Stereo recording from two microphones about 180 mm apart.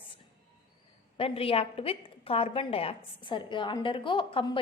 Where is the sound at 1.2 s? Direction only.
30° left (ahead or behind).